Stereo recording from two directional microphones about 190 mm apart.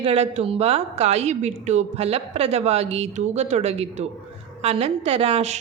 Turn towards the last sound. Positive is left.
turn(degrees=-35)  # may be behind; listen again after turning